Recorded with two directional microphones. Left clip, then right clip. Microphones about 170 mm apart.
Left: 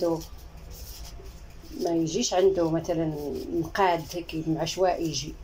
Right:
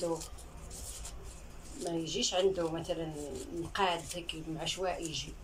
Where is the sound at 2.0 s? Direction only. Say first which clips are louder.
Left 6 dB; 50° left (ahead or behind).